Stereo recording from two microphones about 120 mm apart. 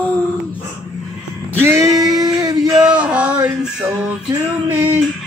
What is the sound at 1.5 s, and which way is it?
Male singing, 20° right (ahead or behind).